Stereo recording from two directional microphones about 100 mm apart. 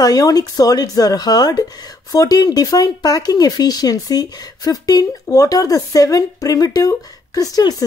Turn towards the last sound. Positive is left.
turn(degrees=40)  # may be behind; listen again after turning